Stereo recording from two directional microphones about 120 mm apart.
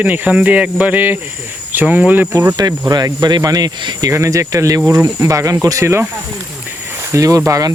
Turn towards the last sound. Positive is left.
turn(degrees=-30)  # may be behind; listen again after turning